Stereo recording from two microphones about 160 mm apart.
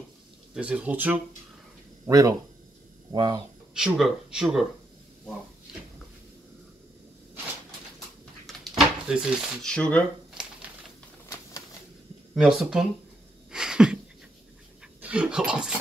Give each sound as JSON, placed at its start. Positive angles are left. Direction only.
{"t": 0.6, "sound": "speech", "side_deg": -10}
{"t": 2.0, "sound": "speech", "side_deg": -20}
{"t": 3.7, "sound": "speech", "side_deg": -5}
{"t": 8.5, "sound": "a sound", "side_deg": 0}
{"t": 11.2, "sound": "typewriter", "side_deg": 20}
{"t": 12.4, "sound": "speech", "side_deg": -5}
{"t": 13.5, "sound": "a sound", "side_deg": -5}
{"t": 15.0, "sound": "dog", "side_deg": -10}